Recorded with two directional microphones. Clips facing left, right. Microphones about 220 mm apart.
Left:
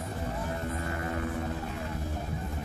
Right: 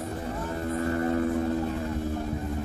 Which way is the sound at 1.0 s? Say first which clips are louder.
Right 9 dB; 35° right (ahead or behind).